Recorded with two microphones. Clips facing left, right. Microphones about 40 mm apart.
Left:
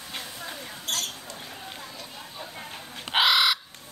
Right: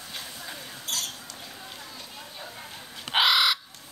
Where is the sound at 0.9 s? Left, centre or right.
Left.